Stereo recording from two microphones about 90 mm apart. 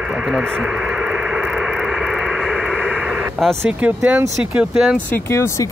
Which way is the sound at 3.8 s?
15° right (ahead or behind).